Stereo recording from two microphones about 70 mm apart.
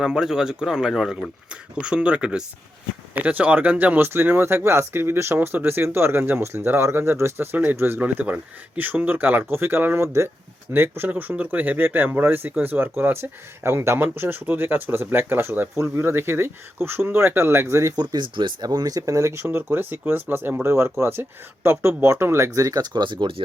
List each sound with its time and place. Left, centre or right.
0.0 s speech: centre; by 7.4 s right
7.5 s speech: right
17.9 s speech: right
22.8 s speech: right